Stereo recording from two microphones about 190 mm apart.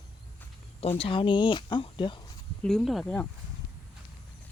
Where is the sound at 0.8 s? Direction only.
30° left (ahead or behind).